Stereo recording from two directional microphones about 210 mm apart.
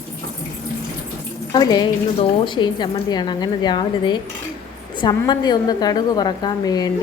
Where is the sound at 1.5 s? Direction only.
20° left (ahead or behind).